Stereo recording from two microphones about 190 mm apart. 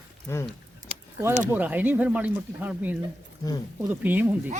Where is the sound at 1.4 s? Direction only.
10° right (ahead or behind).